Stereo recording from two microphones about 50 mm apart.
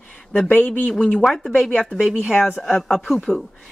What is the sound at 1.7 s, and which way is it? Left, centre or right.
Speech, left.